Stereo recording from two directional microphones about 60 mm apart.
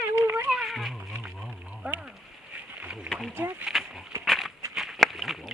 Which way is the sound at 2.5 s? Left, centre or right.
Right.